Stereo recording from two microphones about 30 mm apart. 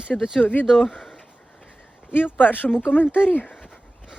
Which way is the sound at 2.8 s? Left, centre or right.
Left.